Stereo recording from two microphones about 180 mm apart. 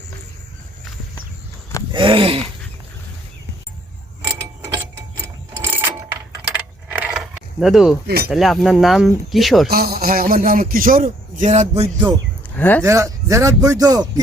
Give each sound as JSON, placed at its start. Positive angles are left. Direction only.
{"t": 1.9, "sound": "a sound", "side_deg": -30}
{"t": 4.2, "sound": "mechanisms", "side_deg": -15}
{"t": 6.4, "sound": "keys jangling", "side_deg": -5}
{"t": 8.0, "sound": "speech", "side_deg": -60}
{"t": 8.3, "sound": "speech", "side_deg": 0}
{"t": 9.6, "sound": "a man's voice", "side_deg": -60}
{"t": 12.5, "sound": "speech", "side_deg": 10}
{"t": 12.8, "sound": "speech", "side_deg": -15}